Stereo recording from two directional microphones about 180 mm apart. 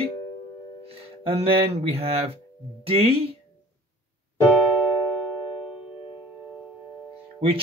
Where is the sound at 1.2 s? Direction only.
35° right (ahead or behind).